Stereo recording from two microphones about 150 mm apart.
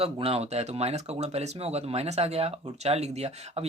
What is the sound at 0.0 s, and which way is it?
Speech, 40° right (ahead or behind).